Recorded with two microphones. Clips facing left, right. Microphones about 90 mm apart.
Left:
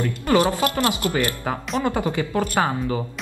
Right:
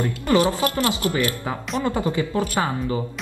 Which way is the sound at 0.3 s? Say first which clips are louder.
Even; 25° left (ahead or behind).